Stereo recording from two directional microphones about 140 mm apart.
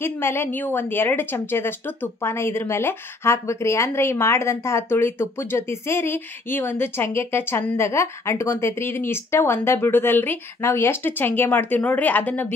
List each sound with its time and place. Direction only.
0.0 s a woman's voice: 15° left (ahead or behind)